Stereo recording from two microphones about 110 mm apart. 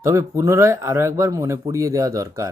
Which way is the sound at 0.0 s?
25° right (ahead or behind).